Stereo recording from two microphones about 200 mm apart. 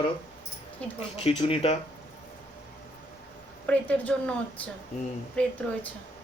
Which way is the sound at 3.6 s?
5° left (ahead or behind).